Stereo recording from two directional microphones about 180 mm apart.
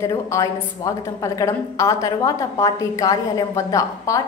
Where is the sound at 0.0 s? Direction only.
20° left (ahead or behind).